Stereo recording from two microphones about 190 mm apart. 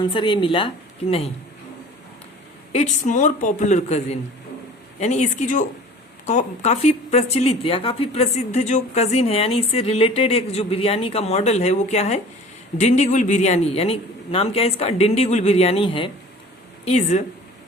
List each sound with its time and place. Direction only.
0.0 s speech: 25° left (ahead or behind)
2.7 s a woman's voice: 40° left (ahead or behind)